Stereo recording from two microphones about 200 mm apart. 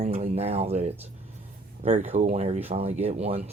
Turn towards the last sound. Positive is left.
turn(degrees=-30)  # may be behind; listen again after turning